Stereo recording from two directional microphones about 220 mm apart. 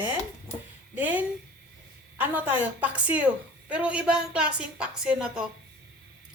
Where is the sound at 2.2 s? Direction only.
10° right (ahead or behind).